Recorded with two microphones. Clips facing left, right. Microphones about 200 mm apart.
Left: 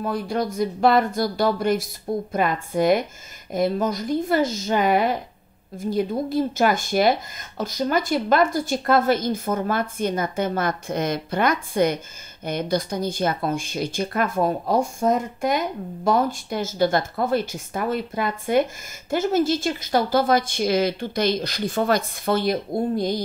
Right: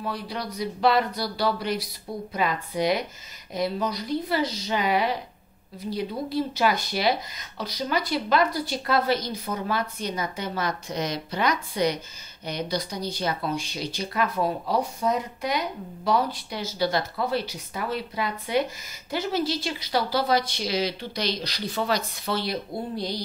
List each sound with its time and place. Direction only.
0.0 s speech: 50° left (ahead or behind)